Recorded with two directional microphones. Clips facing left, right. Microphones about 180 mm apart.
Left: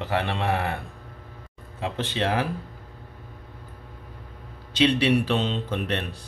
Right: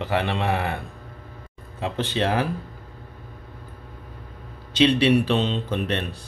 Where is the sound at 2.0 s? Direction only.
35° right (ahead or behind).